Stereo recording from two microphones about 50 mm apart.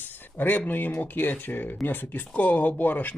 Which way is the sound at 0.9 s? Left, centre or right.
Left.